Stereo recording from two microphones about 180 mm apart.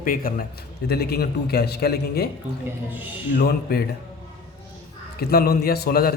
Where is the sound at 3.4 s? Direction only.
55° left (ahead or behind).